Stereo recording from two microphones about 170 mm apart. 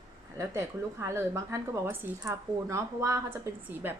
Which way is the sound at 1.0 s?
15° right (ahead or behind).